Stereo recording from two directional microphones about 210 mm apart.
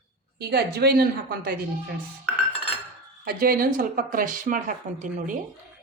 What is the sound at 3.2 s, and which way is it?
Speech, 45° right (ahead or behind).